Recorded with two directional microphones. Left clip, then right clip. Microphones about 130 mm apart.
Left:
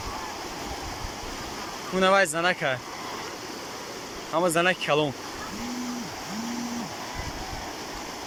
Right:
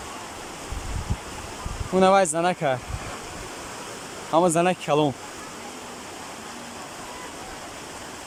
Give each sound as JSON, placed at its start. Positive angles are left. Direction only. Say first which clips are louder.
{"t": 2.0, "sound": "speech", "louder": "right 3 dB", "side_deg": -25}
{"t": 4.3, "sound": "speech", "louder": "right 3 dB", "side_deg": -25}